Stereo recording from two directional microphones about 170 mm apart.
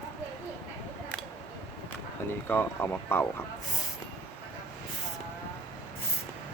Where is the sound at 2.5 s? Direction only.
10° left (ahead or behind).